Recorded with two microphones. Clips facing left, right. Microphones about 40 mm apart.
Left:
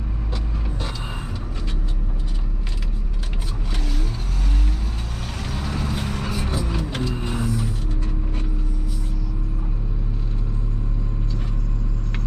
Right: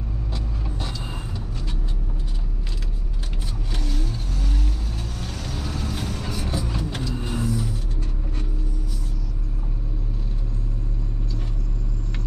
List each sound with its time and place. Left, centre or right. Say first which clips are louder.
3.7 s vehicle: even; centre
6.9 s music: left 3 dB; left